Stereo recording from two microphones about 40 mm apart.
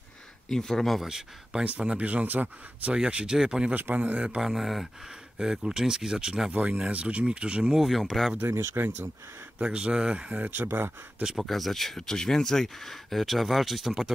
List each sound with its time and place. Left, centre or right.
0.5 s speech: centre
1.0 s speech: centre
1.8 s a man's voice: right
2.2 s speech: right
2.9 s speech: right
3.7 s a man's voice: right
4.4 s speech: centre
5.6 s speech: centre
6.5 s a man's voice: right
7.7 s speech: centre
8.4 s speech: right
9.6 s speech: right
10.6 s speech: right
11.3 s speech: centre